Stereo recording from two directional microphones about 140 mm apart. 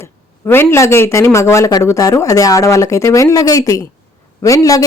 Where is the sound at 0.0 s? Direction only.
15° left (ahead or behind).